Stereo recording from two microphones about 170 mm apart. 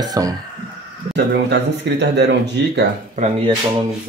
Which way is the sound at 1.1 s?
85° right.